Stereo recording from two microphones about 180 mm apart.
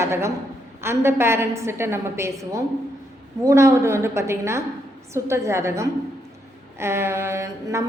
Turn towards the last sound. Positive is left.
turn(degrees=-15)  # may be behind; listen again after turning